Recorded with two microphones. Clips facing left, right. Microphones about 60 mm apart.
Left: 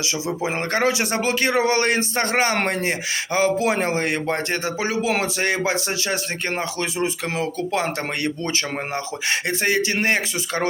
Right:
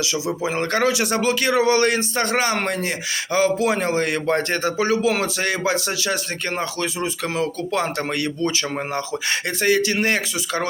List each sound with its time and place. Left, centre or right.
0.0 s speech: left
4.3 s speech: centre
9.3 s speech: left